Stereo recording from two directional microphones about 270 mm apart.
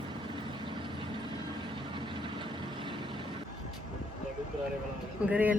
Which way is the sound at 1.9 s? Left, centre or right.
Centre.